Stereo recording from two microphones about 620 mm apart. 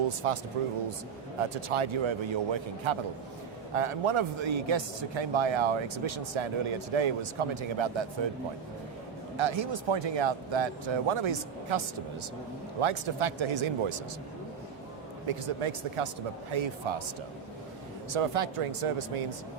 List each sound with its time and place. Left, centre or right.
0.2 s a man's voice: right
9.4 s a man's voice: right
12.8 s a man's voice: right
15.3 s a man's voice: right
18.1 s speech: right